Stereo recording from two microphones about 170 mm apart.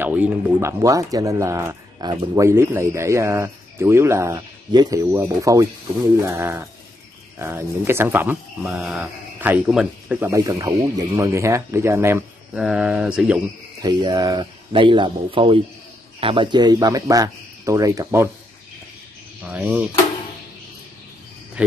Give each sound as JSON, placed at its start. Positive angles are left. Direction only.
{"t": 0.0, "sound": "speech", "side_deg": -10}
{"t": 10.3, "sound": "speech", "side_deg": -20}
{"t": 12.5, "sound": "speech", "side_deg": -5}
{"t": 13.8, "sound": "speech", "side_deg": -25}
{"t": 19.4, "sound": "speech", "side_deg": -5}
{"t": 21.6, "sound": "speech", "side_deg": -5}